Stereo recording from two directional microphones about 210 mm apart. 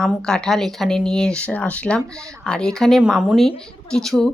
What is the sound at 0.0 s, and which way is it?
Speech, 5° left (ahead or behind).